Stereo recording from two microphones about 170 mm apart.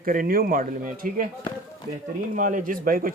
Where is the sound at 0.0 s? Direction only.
55° right (ahead or behind).